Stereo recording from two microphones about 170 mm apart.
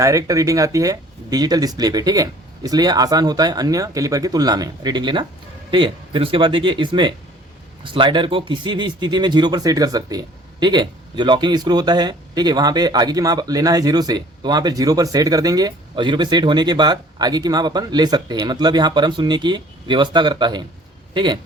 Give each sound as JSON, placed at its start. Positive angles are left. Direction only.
{"t": 0.0, "sound": "speech", "side_deg": -20}